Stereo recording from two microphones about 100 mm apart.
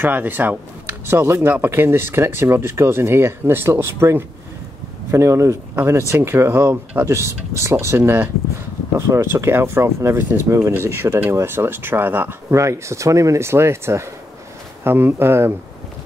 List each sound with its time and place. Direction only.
0.0 s speech: 20° right (ahead or behind)